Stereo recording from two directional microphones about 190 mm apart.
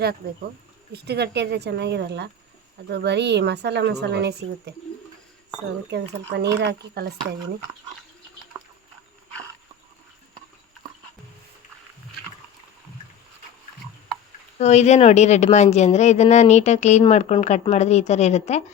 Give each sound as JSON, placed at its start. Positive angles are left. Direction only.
{"t": 0.9, "sound": "a woman's voice", "side_deg": -60}
{"t": 5.9, "sound": "a woman's voice", "side_deg": -60}
{"t": 8.5, "sound": "a sound", "side_deg": -10}
{"t": 14.6, "sound": "speech", "side_deg": 35}